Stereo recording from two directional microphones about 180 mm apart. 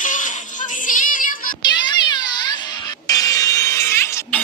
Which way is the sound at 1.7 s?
25° left (ahead or behind).